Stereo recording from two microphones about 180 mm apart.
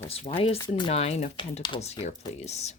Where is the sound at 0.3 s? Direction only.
35° left (ahead or behind).